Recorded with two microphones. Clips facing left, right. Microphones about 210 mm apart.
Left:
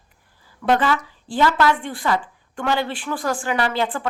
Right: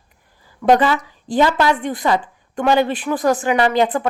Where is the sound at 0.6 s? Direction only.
20° right (ahead or behind).